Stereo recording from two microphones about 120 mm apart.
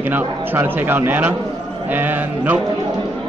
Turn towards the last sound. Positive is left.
turn(degrees=-15)  # may be behind; listen again after turning